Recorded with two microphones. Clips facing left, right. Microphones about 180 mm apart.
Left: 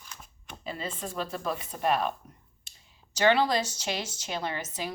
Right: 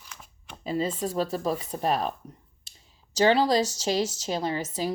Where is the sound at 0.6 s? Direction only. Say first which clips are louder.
Right 8 dB; 35° right (ahead or behind).